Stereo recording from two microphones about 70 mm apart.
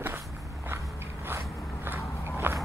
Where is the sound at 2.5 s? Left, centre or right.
Right.